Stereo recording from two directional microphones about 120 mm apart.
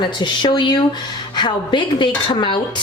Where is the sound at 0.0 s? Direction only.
40° left (ahead or behind).